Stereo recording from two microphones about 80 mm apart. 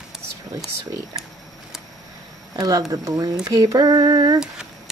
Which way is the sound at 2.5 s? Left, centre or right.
Right.